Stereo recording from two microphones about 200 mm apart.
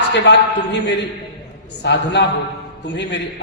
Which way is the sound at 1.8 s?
60° left (ahead or behind).